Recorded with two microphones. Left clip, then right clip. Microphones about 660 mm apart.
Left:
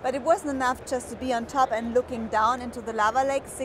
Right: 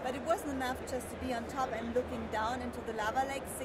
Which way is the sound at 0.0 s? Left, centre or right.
Left.